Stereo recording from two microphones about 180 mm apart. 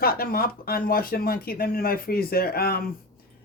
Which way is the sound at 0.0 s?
55° left (ahead or behind).